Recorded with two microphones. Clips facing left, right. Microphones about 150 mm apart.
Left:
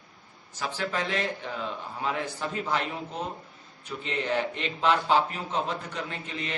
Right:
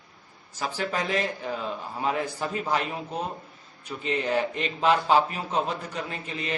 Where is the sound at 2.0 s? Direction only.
40° right (ahead or behind).